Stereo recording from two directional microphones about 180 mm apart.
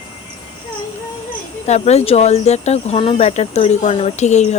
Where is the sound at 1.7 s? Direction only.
40° left (ahead or behind).